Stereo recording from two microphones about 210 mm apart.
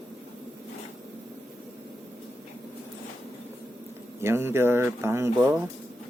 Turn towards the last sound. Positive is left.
turn(degrees=-10)  # may be behind; listen again after turning